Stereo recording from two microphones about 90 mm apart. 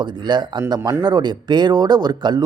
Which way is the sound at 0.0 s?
55° right (ahead or behind).